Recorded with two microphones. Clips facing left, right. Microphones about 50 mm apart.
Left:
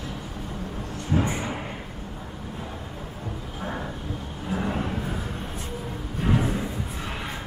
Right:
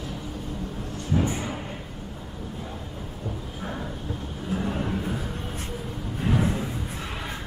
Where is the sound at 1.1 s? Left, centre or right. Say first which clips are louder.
Even; left.